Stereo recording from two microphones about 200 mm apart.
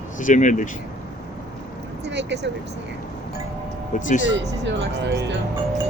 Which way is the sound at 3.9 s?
40° left (ahead or behind).